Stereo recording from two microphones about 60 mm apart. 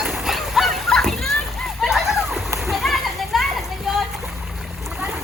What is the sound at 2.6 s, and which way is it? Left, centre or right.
Children playing, centre.